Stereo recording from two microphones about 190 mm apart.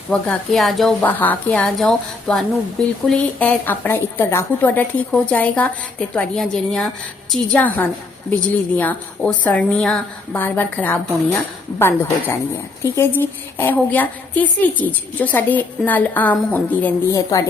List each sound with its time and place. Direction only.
0.1 s a woman's voice: 5° left (ahead or behind)